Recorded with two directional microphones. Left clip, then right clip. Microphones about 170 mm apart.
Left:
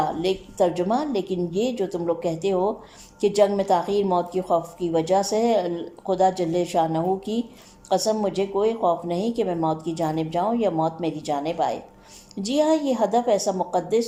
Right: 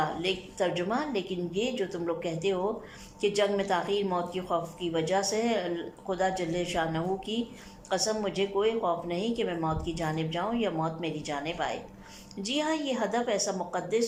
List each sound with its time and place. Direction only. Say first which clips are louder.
0.0 s a woman's voice: left 6 dB; 25° left (ahead or behind)